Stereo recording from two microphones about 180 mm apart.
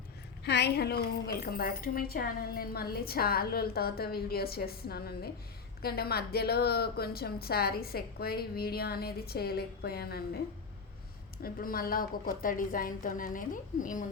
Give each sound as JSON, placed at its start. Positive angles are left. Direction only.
{"t": 0.4, "sound": "a woman's voice", "side_deg": 70}
{"t": 11.4, "sound": "a woman's voice", "side_deg": 55}